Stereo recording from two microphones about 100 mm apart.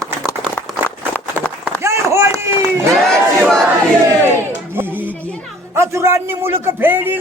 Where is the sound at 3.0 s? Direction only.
5° left (ahead or behind).